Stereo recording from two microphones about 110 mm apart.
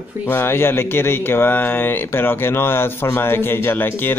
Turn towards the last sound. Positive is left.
turn(degrees=20)  # may be behind; listen again after turning